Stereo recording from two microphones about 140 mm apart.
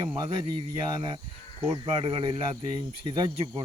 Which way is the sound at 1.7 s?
40° right (ahead or behind).